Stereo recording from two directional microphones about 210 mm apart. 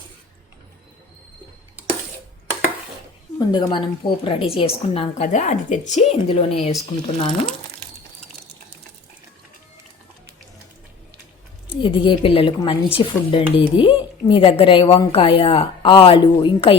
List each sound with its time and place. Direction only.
3.3 s speech: 20° left (ahead or behind)
11.8 s speech: 25° left (ahead or behind)